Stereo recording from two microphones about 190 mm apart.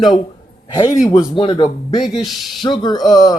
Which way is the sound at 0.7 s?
20° left (ahead or behind).